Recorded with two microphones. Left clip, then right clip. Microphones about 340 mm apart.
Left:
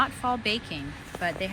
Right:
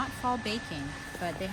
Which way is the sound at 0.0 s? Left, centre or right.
Centre.